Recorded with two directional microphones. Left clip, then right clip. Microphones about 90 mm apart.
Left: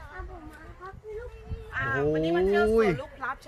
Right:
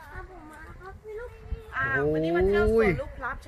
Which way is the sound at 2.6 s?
5° right (ahead or behind).